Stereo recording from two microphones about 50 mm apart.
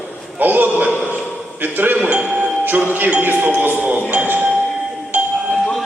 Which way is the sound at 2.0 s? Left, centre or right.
Right.